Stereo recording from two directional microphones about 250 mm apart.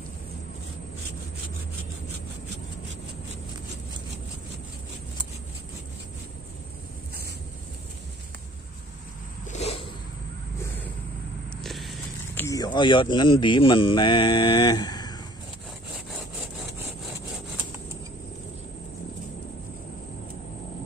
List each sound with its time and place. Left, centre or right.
9.5 s a sound: left
11.5 s vehicle: centre
12.4 s speech: centre